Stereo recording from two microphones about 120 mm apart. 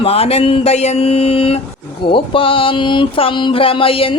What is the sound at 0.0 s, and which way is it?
Speech, 55° left (ahead or behind).